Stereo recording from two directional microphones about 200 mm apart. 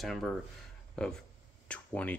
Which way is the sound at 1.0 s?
5° left (ahead or behind).